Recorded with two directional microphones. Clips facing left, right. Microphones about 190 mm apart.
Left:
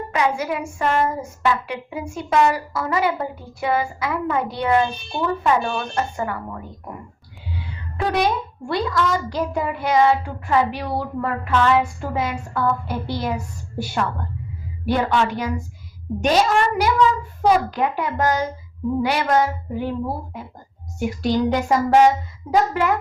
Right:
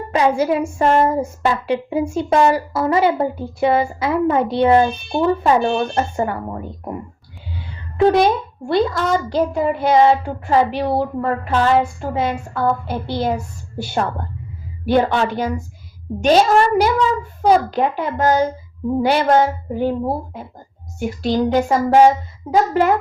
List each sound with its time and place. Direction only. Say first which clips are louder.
0.1 s a woman's voice: right 6 dB; 30° right (ahead or behind)
8.1 s a woman's voice: right 5 dB; 25° right (ahead or behind)
21.2 s a woman's voice: right 3 dB; 30° right (ahead or behind)